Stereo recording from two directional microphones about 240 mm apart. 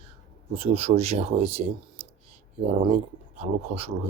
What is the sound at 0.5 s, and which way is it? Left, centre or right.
Speech, right.